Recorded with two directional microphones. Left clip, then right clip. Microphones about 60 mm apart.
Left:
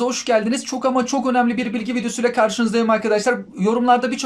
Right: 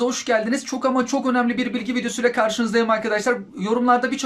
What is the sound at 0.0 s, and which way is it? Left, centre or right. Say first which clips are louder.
Speech: left 2 dB; left.